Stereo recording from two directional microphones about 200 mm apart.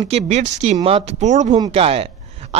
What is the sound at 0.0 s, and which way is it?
A man's voice, 35° right (ahead or behind).